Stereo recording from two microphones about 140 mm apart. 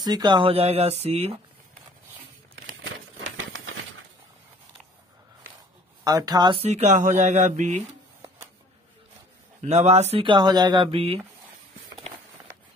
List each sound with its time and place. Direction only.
0.0 s speech: 30° right (ahead or behind); by 1.4 s 45° right (ahead or behind)
6.0 s speech: 25° right (ahead or behind)
6.6 s speech: 55° right (ahead or behind)
9.6 s speech: 50° right (ahead or behind)
10.2 s speech: 30° right (ahead or behind)